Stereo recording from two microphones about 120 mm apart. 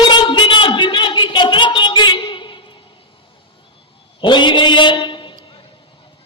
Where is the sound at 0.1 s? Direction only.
40° left (ahead or behind).